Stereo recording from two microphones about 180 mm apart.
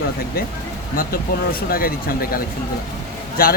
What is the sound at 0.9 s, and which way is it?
Speech, 50° left (ahead or behind).